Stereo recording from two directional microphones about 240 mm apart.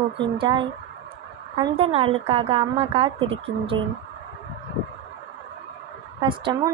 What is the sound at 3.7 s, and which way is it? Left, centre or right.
Speech, right.